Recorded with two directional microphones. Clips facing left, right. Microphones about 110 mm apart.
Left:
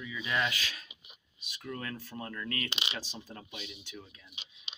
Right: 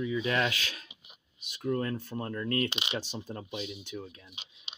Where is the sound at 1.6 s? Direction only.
30° right (ahead or behind).